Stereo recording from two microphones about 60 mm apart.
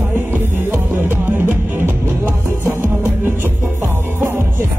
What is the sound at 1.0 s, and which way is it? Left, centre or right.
Music, right.